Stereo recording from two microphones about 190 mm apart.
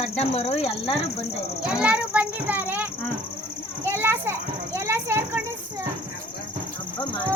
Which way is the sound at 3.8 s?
10° right (ahead or behind).